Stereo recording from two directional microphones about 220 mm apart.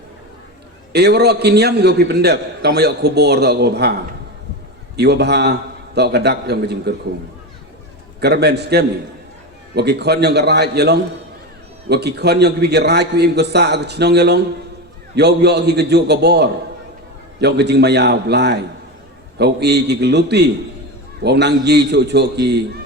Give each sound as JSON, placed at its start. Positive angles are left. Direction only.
{"t": 0.9, "sound": "a man's voice", "side_deg": -50}
{"t": 4.9, "sound": "a man's voice", "side_deg": -50}
{"t": 8.2, "sound": "a man's voice", "side_deg": -50}